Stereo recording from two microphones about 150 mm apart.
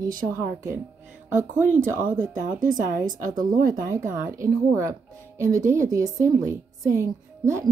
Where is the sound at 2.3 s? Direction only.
60° right (ahead or behind).